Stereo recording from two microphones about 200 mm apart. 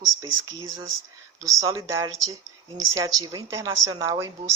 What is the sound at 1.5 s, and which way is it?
Speech, 15° right (ahead or behind).